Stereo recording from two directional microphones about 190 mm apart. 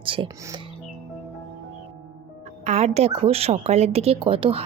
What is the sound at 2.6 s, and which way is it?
Speech, 35° right (ahead or behind).